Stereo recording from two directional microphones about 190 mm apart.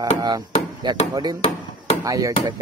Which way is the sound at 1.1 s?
20° right (ahead or behind).